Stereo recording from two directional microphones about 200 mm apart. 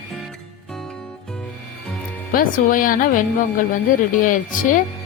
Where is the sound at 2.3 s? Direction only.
45° left (ahead or behind).